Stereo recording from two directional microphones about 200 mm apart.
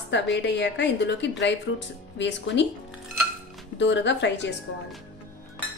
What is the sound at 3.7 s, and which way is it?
Speech, 65° left (ahead or behind).